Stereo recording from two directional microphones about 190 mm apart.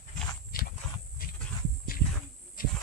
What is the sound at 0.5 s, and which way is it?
Walk, 50° left (ahead or behind).